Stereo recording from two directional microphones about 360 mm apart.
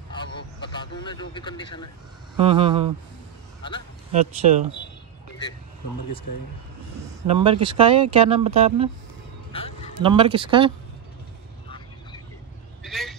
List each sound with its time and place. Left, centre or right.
0.1 s vehicle: centre
2.3 s speech: centre
4.1 s speech: centre
7.2 s speech: centre
9.5 s duck: centre
10.0 s speech: centre
12.8 s vehicle: centre